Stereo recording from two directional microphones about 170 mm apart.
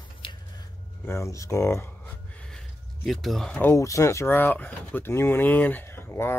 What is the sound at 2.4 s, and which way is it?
Speech, centre (ahead or behind).